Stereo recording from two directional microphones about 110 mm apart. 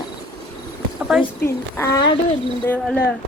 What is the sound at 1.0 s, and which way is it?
Speech, 5° right (ahead or behind).